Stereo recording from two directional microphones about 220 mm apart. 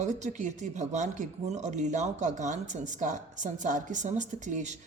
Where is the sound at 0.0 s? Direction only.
30° right (ahead or behind).